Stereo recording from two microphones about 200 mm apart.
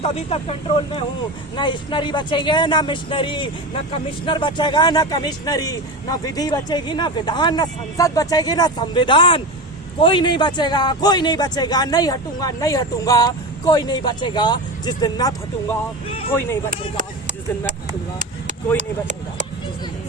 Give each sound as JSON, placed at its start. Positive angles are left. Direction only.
{"t": 0.0, "sound": "speech", "side_deg": 30}
{"t": 1.5, "sound": "speech", "side_deg": 25}
{"t": 18.8, "sound": "speech", "side_deg": -35}